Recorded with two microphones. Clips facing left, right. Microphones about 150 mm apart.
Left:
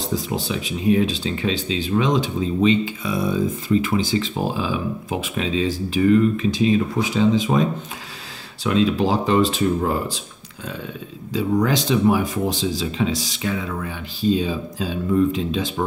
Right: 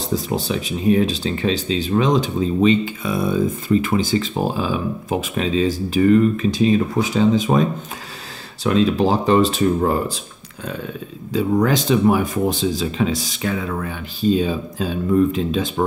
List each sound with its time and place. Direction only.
0.1 s speech: 40° right (ahead or behind)
8.6 s speech: 40° right (ahead or behind)
11.3 s speech: 50° right (ahead or behind)